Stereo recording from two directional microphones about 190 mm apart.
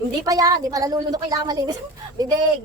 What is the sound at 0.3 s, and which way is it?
A woman's voice, 20° right (ahead or behind).